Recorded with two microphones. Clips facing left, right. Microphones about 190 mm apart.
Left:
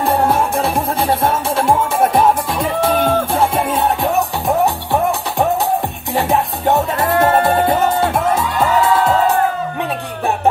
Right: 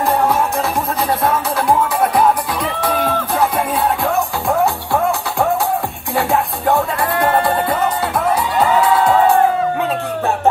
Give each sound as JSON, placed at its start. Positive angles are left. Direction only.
{"t": 2.8, "sound": "music", "side_deg": 25}